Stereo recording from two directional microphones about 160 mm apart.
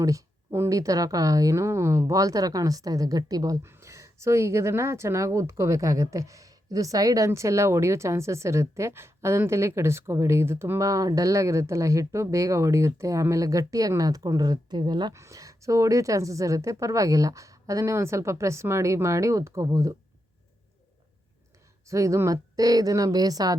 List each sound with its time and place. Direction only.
0.0 s speech: 20° right (ahead or behind)
21.8 s speech: 20° right (ahead or behind)